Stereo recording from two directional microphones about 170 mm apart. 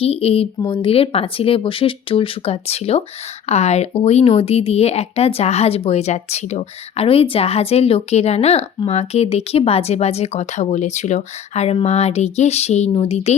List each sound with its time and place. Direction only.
0.0 s speech: 35° left (ahead or behind)